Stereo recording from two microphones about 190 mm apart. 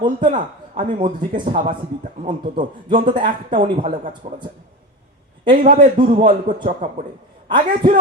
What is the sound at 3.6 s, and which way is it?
Speech, 45° right (ahead or behind).